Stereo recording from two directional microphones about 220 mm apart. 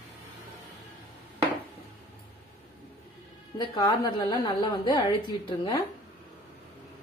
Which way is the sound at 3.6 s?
15° left (ahead or behind).